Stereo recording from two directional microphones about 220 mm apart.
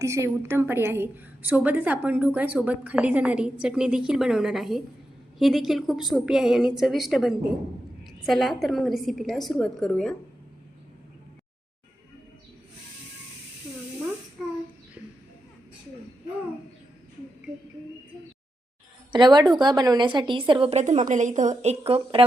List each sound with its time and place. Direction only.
0.0 s a woman's voice: 15° right (ahead or behind); by 10.2 s 5° left (ahead or behind)
19.1 s a woman's voice: 20° right (ahead or behind)